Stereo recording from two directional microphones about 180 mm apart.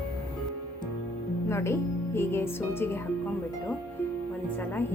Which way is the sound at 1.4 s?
15° left (ahead or behind).